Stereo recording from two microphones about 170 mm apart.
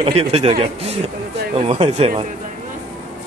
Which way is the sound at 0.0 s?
35° right (ahead or behind).